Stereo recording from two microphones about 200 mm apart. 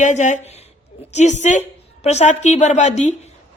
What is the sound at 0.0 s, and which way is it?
A woman's voice, 35° left (ahead or behind).